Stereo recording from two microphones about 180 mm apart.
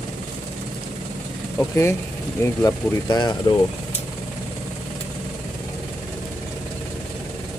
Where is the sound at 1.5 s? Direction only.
15° left (ahead or behind).